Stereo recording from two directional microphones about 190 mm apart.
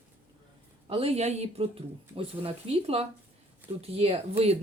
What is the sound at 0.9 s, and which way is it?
Speech, 30° right (ahead or behind).